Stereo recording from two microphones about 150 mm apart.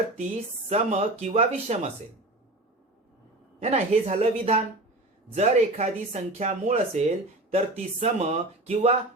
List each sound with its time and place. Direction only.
0.7 s speech: 45° right (ahead or behind)
3.6 s speech: 45° right (ahead or behind)